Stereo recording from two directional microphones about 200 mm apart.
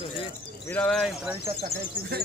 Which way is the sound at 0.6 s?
5° left (ahead or behind).